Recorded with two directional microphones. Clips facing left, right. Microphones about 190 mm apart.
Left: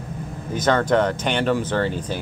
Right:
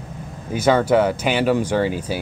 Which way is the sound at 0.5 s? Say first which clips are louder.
Right 3 dB; 10° right (ahead or behind).